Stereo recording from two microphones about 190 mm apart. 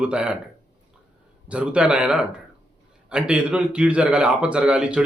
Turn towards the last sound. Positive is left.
turn(degrees=-5)  # may be behind; listen again after turning